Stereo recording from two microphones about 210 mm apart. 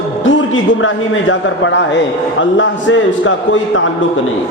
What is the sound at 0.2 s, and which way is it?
A man's voice, 65° left (ahead or behind).